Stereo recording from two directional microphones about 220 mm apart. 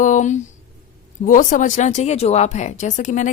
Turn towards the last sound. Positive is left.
turn(degrees=35)  # may be behind; listen again after turning